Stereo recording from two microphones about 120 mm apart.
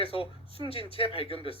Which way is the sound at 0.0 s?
50° left (ahead or behind).